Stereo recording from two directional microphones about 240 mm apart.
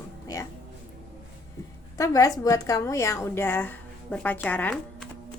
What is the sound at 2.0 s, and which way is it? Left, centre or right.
A woman's voice, centre.